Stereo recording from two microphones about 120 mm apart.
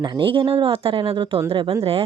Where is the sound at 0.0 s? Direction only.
45° right (ahead or behind).